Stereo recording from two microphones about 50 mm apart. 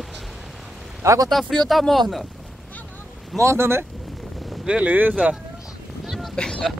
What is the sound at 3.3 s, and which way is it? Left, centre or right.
Speech, right.